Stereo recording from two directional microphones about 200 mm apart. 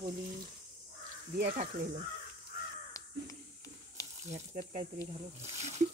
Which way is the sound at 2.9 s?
15° left (ahead or behind).